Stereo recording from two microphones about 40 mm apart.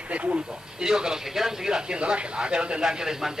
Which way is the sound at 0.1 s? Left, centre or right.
Right.